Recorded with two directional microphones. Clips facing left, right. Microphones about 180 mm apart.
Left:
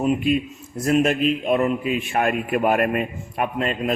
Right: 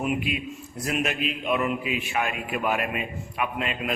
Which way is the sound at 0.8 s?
45° left (ahead or behind).